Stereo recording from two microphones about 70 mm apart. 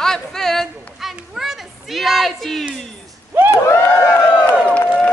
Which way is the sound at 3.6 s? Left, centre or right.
Left.